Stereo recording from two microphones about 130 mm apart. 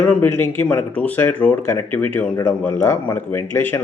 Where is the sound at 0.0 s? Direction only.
10° left (ahead or behind).